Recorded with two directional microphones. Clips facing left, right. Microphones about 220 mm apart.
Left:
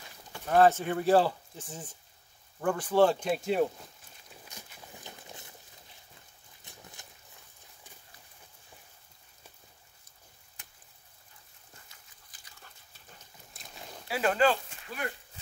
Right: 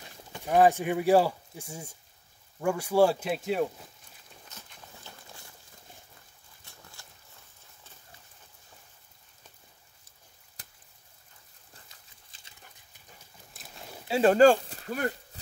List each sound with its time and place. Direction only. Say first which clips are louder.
0.0 s speech: right 2 dB; 15° right (ahead or behind); by 3.8 s centre (ahead or behind)
4.3 s walk: left 1 dB; 10° left (ahead or behind)
6.6 s boat: left 2 dB; 20° left (ahead or behind)
10.6 s chop: right 3 dB; 40° right (ahead or behind)
12.3 s dog: even; 25° right (ahead or behind)
13.2 s horse: right 2 dB; centre (ahead or behind)
14.0 s a sound: right 7 dB; 25° right (ahead or behind)
14.3 s speech: right 8 dB; 40° right (ahead or behind)